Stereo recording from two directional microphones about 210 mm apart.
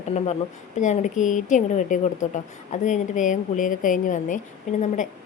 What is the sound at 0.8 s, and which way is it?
A woman's voice, 35° left (ahead or behind).